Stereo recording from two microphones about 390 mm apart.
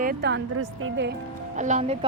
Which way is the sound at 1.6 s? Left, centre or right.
Centre.